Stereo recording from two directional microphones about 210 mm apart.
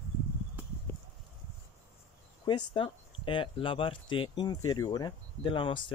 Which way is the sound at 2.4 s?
20° left (ahead or behind).